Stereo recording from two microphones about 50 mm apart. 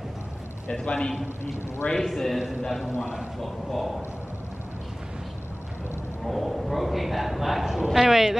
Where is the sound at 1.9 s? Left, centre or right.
Centre.